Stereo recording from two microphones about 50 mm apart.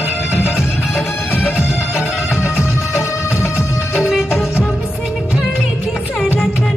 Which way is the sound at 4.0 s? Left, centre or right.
Centre.